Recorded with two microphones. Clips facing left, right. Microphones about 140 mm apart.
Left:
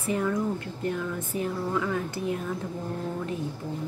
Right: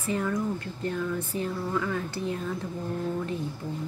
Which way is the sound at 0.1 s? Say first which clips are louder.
Left 1 dB; 10° left (ahead or behind).